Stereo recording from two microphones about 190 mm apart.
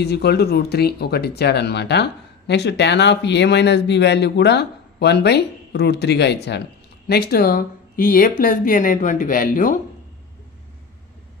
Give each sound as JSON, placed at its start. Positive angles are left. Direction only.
{"t": 0.0, "sound": "speech", "side_deg": 60}